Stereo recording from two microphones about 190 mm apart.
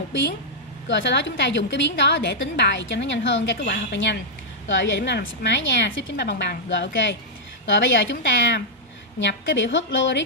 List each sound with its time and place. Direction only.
0.8 s a woman's voice: 70° left (ahead or behind)